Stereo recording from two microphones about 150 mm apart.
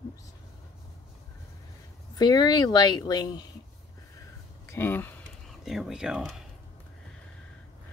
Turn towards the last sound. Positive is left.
turn(degrees=-5)  # may be behind; listen again after turning